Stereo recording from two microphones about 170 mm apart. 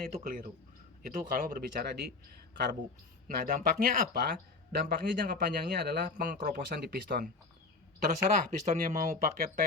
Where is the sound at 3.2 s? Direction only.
55° right (ahead or behind).